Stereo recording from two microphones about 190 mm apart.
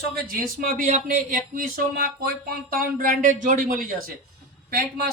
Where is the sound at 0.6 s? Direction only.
45° right (ahead or behind).